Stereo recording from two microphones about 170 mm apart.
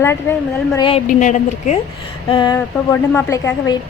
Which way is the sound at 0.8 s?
30° left (ahead or behind).